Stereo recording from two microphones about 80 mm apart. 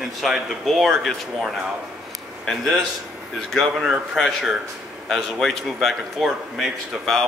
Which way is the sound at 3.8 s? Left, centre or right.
Centre.